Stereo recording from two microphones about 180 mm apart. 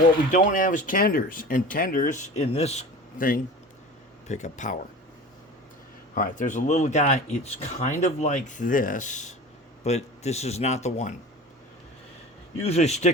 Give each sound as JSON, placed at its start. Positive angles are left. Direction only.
{"t": 0.3, "sound": "speech", "side_deg": 45}
{"t": 3.2, "sound": "speech", "side_deg": 50}
{"t": 4.3, "sound": "speech", "side_deg": 40}
{"t": 6.1, "sound": "speech", "side_deg": 45}
{"t": 12.6, "sound": "speech", "side_deg": 35}